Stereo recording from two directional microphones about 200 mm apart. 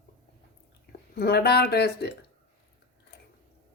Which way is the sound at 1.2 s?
55° left (ahead or behind).